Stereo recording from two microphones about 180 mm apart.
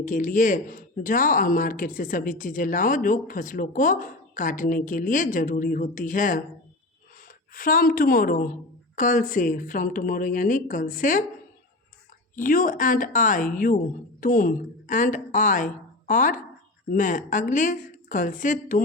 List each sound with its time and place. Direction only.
0.0 s speech: 50° left (ahead or behind)
12.4 s a woman's voice: 50° left (ahead or behind)